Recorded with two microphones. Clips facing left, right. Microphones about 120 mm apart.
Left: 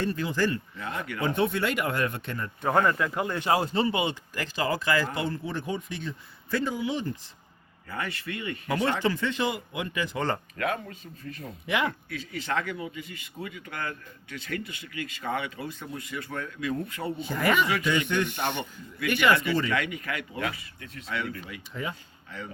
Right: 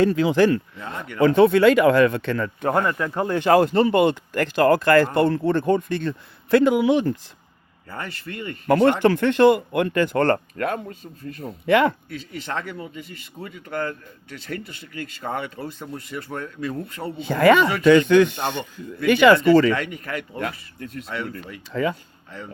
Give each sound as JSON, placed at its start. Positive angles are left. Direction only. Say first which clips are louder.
{"t": 0.0, "sound": "a man's voice", "louder": "right 10 dB", "side_deg": -90}
{"t": 8.6, "sound": "speech", "louder": "right 10 dB", "side_deg": -60}
{"t": 10.6, "sound": "speech", "louder": "right 4 dB", "side_deg": -45}
{"t": 11.6, "sound": "speech", "louder": "right 10 dB", "side_deg": -65}
{"t": 13.1, "sound": "speech", "louder": "right 2 dB", "side_deg": -35}
{"t": 17.2, "sound": "a man's voice", "louder": "right 10 dB", "side_deg": -85}
{"t": 19.7, "sound": "speech", "louder": "right 3 dB", "side_deg": -35}
{"t": 21.7, "sound": "speech", "louder": "right 11 dB", "side_deg": -85}